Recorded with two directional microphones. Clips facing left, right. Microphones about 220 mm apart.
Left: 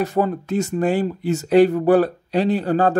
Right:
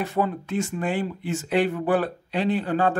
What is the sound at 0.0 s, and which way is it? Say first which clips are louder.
Speech: left 5 dB; 40° left (ahead or behind).